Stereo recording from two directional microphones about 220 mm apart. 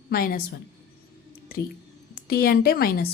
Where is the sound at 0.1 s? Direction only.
40° left (ahead or behind).